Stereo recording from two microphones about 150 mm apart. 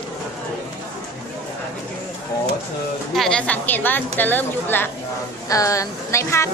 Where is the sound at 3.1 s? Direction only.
5° left (ahead or behind).